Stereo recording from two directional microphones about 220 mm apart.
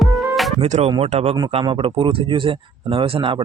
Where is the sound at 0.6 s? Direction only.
30° right (ahead or behind).